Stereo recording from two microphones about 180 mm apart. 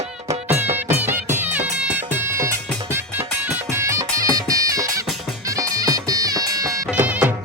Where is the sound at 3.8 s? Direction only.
15° right (ahead or behind).